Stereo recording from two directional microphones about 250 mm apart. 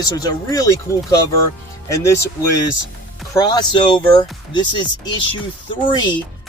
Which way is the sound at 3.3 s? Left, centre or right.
Centre.